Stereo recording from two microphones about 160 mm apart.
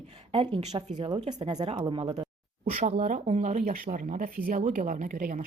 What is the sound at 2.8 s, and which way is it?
Speech, 50° right (ahead or behind).